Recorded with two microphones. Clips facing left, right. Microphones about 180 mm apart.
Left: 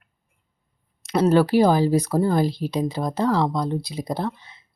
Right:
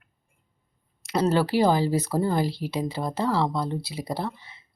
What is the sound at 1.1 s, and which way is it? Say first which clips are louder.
Speech: left 5 dB; 15° left (ahead or behind).